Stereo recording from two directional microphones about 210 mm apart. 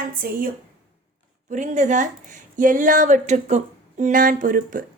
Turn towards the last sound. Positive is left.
turn(degrees=-40)  # may be behind; listen again after turning